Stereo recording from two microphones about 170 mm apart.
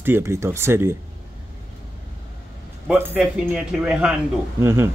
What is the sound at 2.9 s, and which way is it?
Speech, 10° right (ahead or behind).